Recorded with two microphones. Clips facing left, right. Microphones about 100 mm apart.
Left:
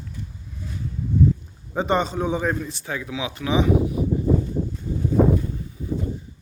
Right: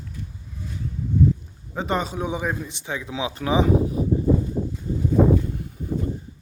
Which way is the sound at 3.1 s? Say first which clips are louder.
Right 1 dB; 35° right (ahead or behind).